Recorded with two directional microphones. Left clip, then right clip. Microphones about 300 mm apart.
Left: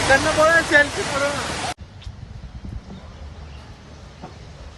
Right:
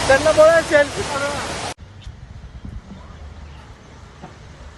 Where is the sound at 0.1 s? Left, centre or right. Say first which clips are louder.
Right 4 dB; right.